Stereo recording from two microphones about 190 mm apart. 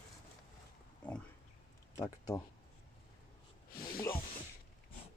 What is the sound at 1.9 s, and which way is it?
Speech, 20° left (ahead or behind).